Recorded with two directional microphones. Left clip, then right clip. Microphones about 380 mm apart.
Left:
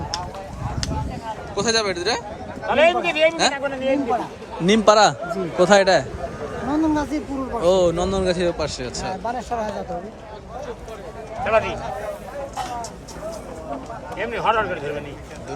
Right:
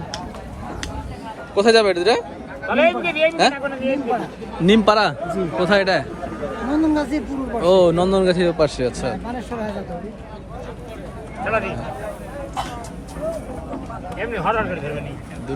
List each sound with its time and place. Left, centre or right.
1.5 s a man's voice: centre
2.6 s speech: left
4.6 s a man's voice: centre
9.2 s a man's voice: centre
11.4 s speech: left
14.2 s speech: left